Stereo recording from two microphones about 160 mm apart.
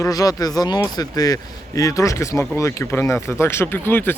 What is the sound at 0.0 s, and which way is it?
Speech, 20° left (ahead or behind).